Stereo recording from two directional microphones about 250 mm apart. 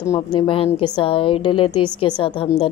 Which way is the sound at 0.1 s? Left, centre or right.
Centre.